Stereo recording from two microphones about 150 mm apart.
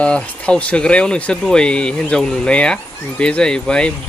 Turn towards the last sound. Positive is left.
turn(degrees=5)  # may be behind; listen again after turning